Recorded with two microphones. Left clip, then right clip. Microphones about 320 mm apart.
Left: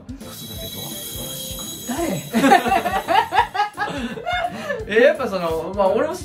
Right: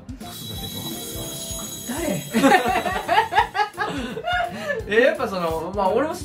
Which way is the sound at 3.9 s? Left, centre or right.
Centre.